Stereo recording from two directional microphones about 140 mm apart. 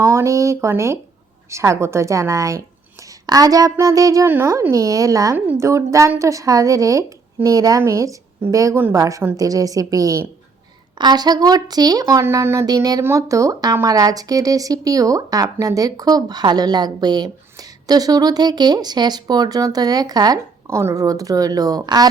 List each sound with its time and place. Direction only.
0.0 s speech: 20° right (ahead or behind)